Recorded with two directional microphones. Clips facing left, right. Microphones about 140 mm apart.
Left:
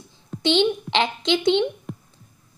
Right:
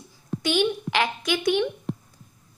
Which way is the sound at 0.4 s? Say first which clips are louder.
Left 4 dB; 25° left (ahead or behind).